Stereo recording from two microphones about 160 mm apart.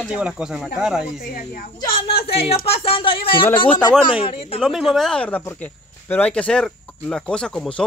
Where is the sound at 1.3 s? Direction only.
60° left (ahead or behind).